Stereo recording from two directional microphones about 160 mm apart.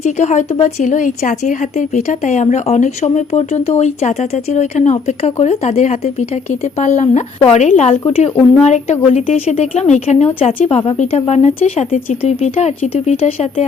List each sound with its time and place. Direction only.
0.0 s a woman's voice: 45° left (ahead or behind)